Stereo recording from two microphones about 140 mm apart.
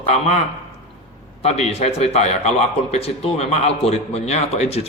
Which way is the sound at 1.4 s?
50° left (ahead or behind).